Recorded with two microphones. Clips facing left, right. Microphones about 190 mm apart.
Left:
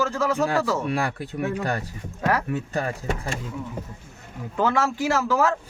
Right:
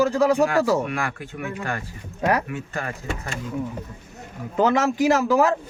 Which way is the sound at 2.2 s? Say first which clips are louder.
Right 2 dB; 15° right (ahead or behind).